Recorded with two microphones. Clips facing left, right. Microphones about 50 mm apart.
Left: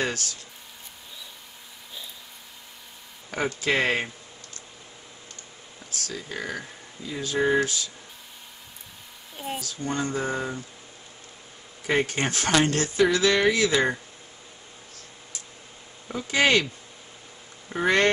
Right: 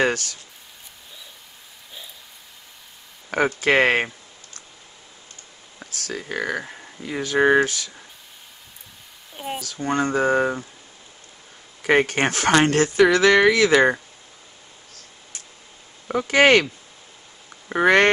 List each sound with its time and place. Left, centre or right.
0.0 s speech: right
3.3 s speech: right
5.9 s speech: right
6.6 s a sound: right
7.0 s speech: right
9.3 s a sound: centre
9.6 s speech: right
11.8 s speech: right
16.1 s speech: right
17.7 s speech: right